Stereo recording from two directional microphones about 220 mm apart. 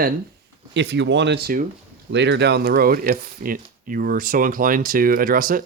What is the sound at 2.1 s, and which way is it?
Speech, 55° right (ahead or behind).